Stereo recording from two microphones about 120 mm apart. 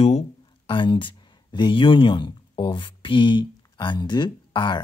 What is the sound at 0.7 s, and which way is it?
Speech, 45° left (ahead or behind).